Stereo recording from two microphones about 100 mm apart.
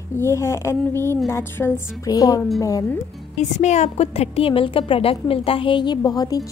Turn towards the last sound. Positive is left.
turn(degrees=40)  # may be behind; listen again after turning